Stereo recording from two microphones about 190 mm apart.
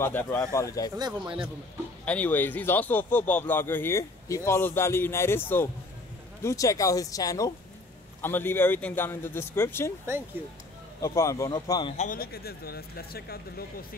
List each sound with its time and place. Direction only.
0.0 s speech: 10° left (ahead or behind)
0.9 s speech: 25° right (ahead or behind)
2.0 s speech: 10° left (ahead or behind)
10.4 s speech: 10° right (ahead or behind)
11.0 s speech: 15° left (ahead or behind)
12.0 s speech: 50° left (ahead or behind)